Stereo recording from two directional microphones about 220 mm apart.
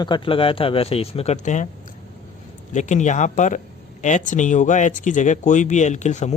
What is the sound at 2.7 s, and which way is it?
Speech, 35° left (ahead or behind).